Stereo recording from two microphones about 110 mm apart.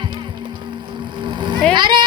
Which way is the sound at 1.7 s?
45° right (ahead or behind).